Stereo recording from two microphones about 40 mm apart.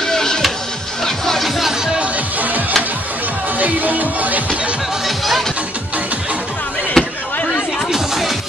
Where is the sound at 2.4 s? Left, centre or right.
Right.